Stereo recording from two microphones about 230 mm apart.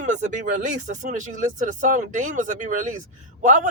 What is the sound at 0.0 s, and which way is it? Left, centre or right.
Speech, right.